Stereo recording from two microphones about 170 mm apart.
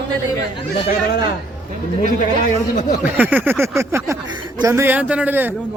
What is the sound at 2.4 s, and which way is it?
Speech, 50° left (ahead or behind).